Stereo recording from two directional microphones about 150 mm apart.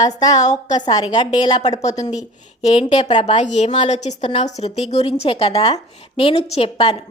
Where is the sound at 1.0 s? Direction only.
35° left (ahead or behind).